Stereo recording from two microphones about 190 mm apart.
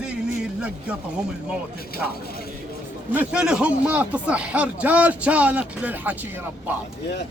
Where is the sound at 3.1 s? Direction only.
5° right (ahead or behind).